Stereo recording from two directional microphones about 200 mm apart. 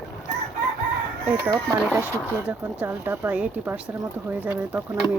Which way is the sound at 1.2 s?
15° right (ahead or behind).